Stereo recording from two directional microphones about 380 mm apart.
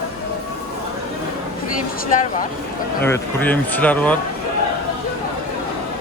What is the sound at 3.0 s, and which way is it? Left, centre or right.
A man's voice, centre.